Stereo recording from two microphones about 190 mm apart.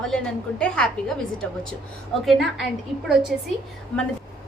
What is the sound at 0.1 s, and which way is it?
A woman's voice, 5° left (ahead or behind).